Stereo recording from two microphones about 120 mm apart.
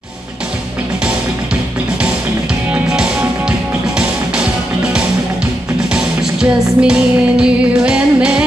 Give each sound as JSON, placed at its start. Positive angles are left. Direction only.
{"t": 2.7, "sound": "music", "side_deg": -10}
{"t": 5.9, "sound": "music", "side_deg": -5}